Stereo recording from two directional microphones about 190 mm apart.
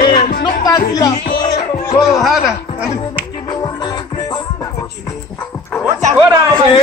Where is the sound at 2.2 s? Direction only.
Centre (ahead or behind).